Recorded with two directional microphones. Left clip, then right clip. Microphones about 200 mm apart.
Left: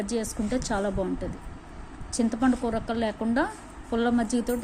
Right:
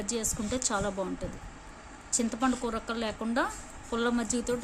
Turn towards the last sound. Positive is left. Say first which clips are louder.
# left 4 dB
turn(degrees=0)  # may be behind; listen again after turning